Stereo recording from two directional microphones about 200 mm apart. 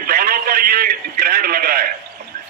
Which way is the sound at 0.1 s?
45° right (ahead or behind).